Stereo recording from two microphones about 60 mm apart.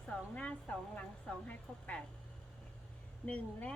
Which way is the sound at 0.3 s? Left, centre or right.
Left.